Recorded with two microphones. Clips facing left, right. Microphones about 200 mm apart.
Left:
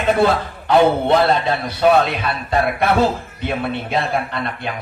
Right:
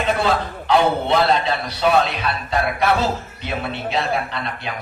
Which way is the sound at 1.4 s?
50° left (ahead or behind).